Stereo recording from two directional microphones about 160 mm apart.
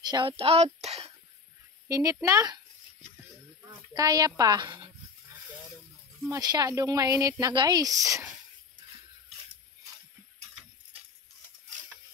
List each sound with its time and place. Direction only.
0.0 s speech: 30° right (ahead or behind)
1.9 s speech: 20° right (ahead or behind)
3.9 s speech: 20° right (ahead or behind)
6.2 s speech: 20° right (ahead or behind)